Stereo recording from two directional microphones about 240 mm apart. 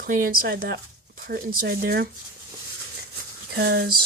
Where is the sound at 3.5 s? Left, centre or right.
Right.